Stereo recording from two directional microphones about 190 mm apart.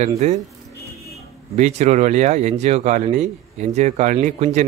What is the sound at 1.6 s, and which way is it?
Speech, 35° right (ahead or behind).